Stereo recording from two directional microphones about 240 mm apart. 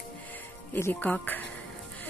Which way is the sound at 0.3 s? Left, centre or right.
Centre.